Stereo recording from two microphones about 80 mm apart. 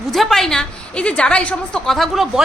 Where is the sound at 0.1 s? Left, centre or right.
Centre.